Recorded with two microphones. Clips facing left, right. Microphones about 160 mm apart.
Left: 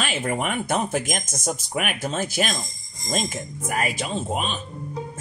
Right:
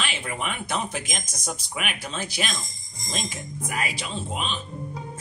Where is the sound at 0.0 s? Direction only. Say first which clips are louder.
Left 5 dB; 45° left (ahead or behind).